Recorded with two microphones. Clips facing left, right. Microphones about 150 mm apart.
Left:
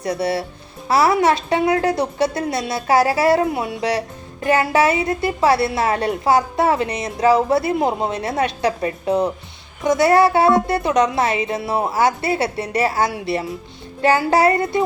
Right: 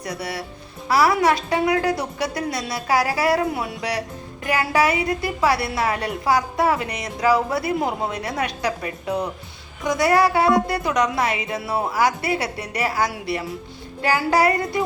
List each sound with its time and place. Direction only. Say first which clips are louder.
0.0 s a woman's voice: left 8 dB; 25° left (ahead or behind)